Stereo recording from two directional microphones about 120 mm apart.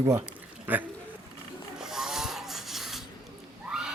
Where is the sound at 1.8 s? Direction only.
5° right (ahead or behind).